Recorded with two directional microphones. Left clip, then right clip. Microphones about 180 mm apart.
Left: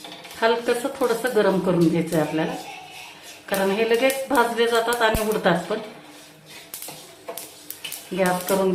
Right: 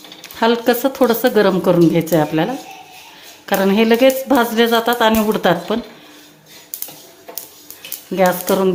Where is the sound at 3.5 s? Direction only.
65° right (ahead or behind).